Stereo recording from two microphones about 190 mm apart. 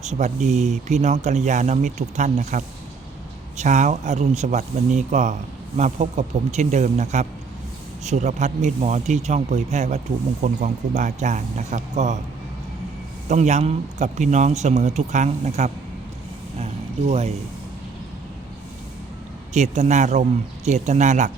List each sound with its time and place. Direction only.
0.0 s speech: 40° right (ahead or behind)
13.2 s speech: 40° right (ahead or behind)
17.1 s speech: 35° right (ahead or behind)
19.5 s speech: 35° right (ahead or behind)